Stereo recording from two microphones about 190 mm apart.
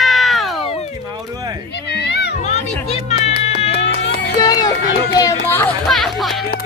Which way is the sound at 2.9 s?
35° left (ahead or behind).